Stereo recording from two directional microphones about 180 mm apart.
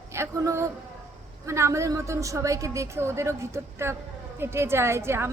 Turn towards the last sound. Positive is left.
turn(degrees=-15)  # may be behind; listen again after turning